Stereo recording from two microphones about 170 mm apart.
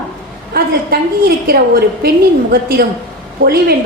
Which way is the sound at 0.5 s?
60° right (ahead or behind).